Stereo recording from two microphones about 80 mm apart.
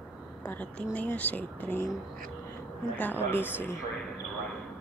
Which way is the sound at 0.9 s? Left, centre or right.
Centre.